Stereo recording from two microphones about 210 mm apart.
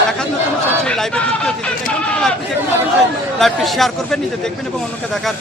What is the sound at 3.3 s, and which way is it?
Speech, centre (ahead or behind).